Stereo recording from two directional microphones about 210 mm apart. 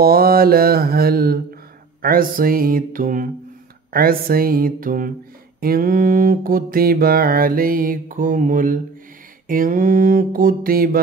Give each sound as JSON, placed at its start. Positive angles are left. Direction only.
{"t": 0.0, "sound": "mantra", "side_deg": -45}